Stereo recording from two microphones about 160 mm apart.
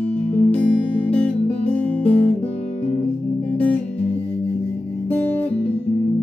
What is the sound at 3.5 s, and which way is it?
Music, 10° left (ahead or behind).